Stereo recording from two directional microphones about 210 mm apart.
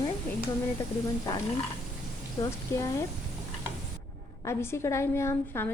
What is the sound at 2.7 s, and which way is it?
Speech, 15° left (ahead or behind).